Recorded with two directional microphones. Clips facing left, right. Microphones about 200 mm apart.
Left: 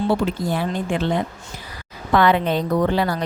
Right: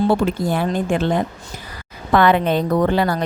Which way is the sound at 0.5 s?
50° right (ahead or behind).